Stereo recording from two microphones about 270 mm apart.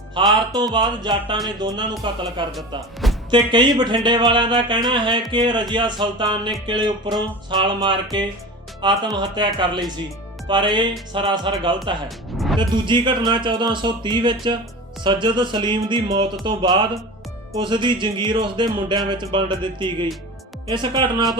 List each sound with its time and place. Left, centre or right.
0.1 s speech: centre
2.5 s speech: centre
3.2 s speech: centre
10.5 s speech: centre
12.0 s music: centre
12.5 s speech: centre